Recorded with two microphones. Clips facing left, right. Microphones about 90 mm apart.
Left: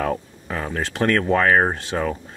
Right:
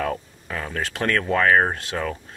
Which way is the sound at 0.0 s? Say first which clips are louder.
Left 2 dB; 20° left (ahead or behind).